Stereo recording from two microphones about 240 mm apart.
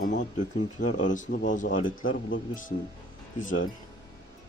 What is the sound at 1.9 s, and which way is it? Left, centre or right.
Speech, left.